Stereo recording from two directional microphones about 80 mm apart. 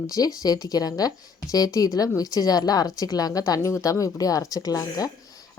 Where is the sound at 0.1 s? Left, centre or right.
Left.